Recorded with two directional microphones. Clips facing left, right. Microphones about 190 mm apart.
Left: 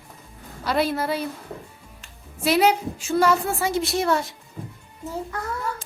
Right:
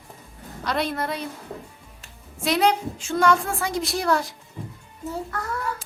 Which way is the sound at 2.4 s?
5° left (ahead or behind).